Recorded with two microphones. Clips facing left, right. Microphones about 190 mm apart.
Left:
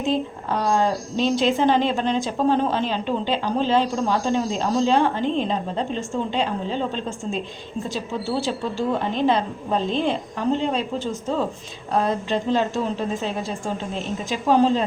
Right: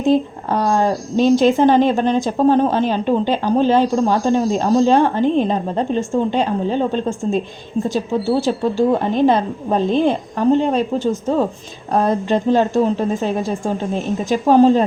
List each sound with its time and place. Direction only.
0.0 s speech: 45° right (ahead or behind)
13.9 s speech: 45° right (ahead or behind)